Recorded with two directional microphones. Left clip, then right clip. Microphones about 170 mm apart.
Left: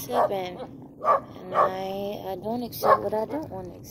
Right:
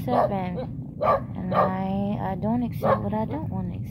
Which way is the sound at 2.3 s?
20° right (ahead or behind).